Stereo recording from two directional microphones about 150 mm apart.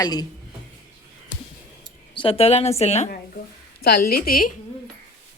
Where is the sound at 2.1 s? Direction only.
35° left (ahead or behind).